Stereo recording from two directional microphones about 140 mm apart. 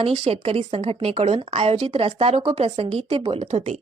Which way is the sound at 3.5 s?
55° right (ahead or behind).